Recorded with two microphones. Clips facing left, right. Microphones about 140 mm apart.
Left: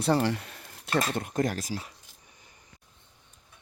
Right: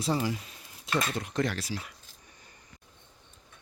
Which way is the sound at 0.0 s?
65° left (ahead or behind).